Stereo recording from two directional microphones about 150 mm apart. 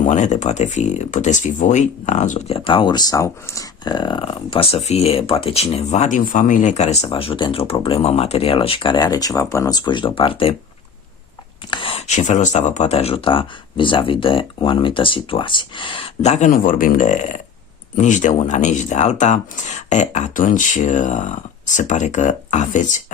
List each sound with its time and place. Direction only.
0.0 s speech: 55° left (ahead or behind)
2.6 s speech: 35° left (ahead or behind)
11.7 s speech: 35° left (ahead or behind)
16.2 s speech: 50° left (ahead or behind)